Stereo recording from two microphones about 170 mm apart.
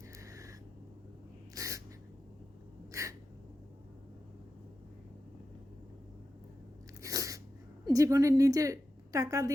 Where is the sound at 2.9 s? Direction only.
20° right (ahead or behind).